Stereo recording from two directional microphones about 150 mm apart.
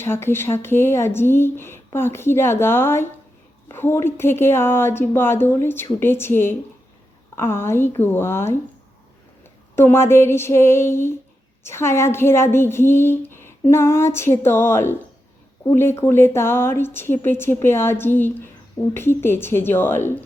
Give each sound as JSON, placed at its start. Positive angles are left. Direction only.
{"t": 0.0, "sound": "a woman's voice", "side_deg": 15}
{"t": 9.7, "sound": "a woman's voice", "side_deg": 15}